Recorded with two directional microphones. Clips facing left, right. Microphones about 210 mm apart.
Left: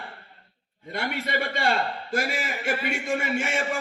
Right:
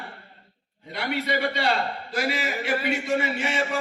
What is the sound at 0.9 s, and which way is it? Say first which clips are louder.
A man's voice: right 2 dB; 50° left (ahead or behind).